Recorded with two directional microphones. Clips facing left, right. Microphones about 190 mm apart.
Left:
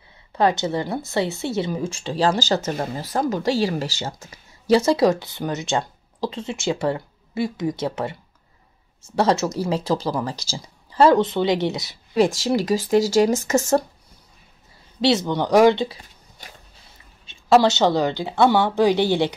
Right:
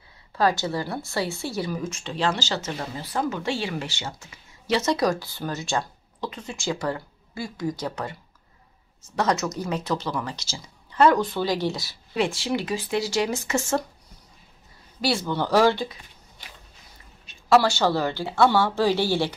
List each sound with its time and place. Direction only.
0.3 s a woman's voice: 20° left (ahead or behind)
12.2 s a woman's voice: 40° left (ahead or behind)
15.0 s speech: 20° left (ahead or behind)
17.3 s speech: 20° left (ahead or behind)